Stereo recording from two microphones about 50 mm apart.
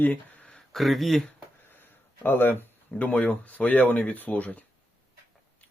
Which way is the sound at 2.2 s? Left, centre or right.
Left.